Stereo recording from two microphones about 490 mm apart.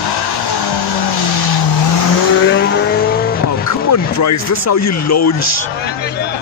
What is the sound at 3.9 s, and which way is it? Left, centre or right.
Speech, left.